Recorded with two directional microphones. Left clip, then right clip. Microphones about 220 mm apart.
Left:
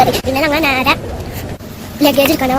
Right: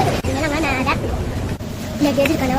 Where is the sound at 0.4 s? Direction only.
40° left (ahead or behind).